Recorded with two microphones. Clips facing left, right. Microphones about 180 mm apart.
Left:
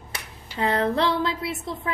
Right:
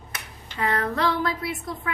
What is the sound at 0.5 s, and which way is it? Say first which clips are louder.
Speech: left 3 dB; 30° left (ahead or behind).